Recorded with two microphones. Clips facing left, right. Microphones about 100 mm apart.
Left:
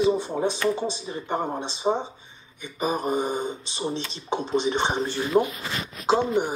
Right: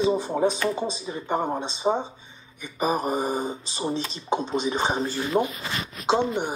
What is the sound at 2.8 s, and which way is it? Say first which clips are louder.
Mantra: right 1 dB; 40° right (ahead or behind).